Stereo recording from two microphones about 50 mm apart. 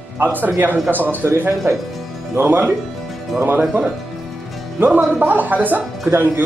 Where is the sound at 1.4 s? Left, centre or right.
Right.